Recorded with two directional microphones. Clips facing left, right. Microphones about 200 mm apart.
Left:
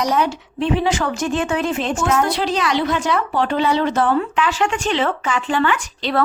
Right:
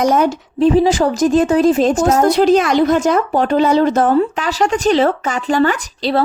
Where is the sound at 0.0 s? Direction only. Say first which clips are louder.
Right 5 dB; 45° right (ahead or behind).